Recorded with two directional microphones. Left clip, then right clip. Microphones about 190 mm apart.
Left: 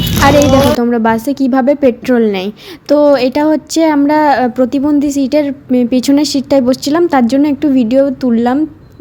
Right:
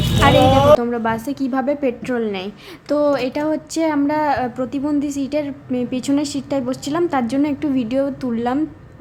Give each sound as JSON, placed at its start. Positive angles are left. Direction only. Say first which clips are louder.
{"t": 0.8, "sound": "a woman's voice", "louder": "left 9 dB", "side_deg": 25}